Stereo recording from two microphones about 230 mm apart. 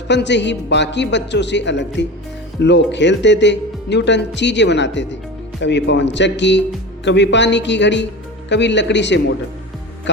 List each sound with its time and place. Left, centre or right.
0.1 s speech: left